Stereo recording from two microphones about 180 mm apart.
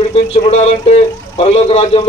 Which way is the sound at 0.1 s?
35° left (ahead or behind).